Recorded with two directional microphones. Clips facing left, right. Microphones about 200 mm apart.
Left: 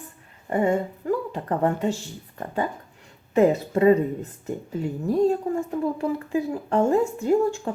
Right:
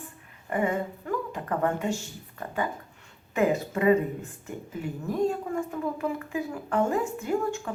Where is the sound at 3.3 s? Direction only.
35° left (ahead or behind).